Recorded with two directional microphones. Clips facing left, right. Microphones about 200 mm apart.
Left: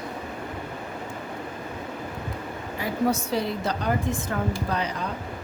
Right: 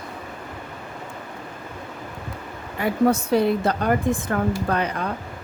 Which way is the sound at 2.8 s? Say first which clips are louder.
Right 5 dB; 55° right (ahead or behind).